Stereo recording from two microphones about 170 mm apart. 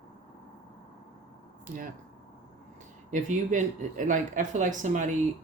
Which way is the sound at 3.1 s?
45° right (ahead or behind).